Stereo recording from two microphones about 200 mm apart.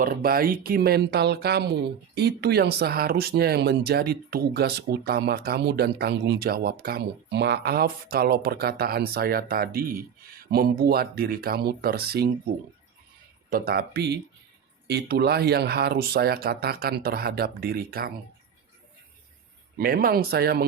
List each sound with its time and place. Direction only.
0.0 s speech: 45° right (ahead or behind)
13.5 s speech: 50° right (ahead or behind)
19.8 s speech: 45° right (ahead or behind)